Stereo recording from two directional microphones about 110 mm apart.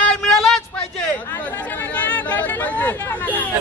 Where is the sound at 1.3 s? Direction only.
20° left (ahead or behind).